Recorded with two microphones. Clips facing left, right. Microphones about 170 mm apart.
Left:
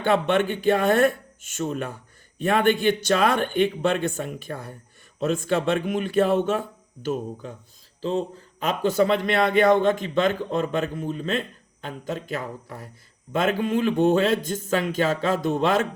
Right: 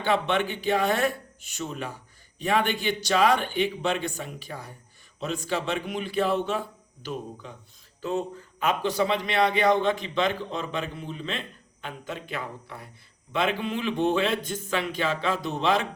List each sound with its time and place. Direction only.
0.0 s a man's voice: 50° left (ahead or behind)
8.0 s a man's voice: 35° left (ahead or behind)